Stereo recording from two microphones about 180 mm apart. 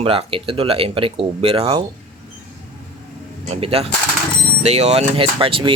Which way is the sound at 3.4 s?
35° right (ahead or behind).